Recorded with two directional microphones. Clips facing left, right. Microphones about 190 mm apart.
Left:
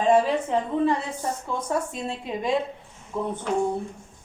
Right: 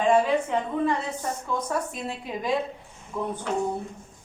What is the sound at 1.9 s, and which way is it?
Speech, 25° left (ahead or behind).